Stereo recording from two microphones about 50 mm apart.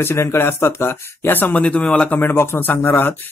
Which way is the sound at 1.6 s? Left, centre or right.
Left.